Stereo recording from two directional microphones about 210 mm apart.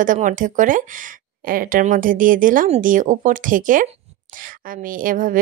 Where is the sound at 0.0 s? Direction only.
40° right (ahead or behind).